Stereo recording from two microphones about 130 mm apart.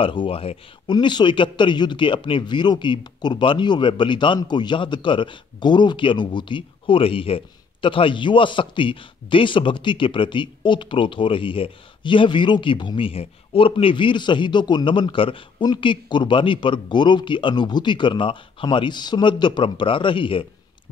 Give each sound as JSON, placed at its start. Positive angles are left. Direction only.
{"t": 0.0, "sound": "speech", "side_deg": 40}
{"t": 0.9, "sound": "speech", "side_deg": 35}